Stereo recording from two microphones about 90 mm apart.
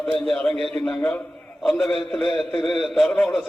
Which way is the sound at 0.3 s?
10° left (ahead or behind).